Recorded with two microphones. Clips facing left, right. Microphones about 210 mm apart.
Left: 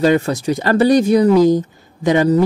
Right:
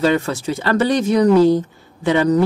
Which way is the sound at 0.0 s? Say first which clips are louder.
Left 3 dB; 40° left (ahead or behind).